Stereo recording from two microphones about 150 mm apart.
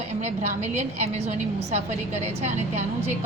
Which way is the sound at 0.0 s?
45° right (ahead or behind).